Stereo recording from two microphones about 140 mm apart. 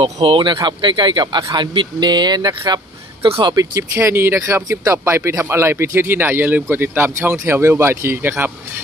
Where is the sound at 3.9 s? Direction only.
15° right (ahead or behind).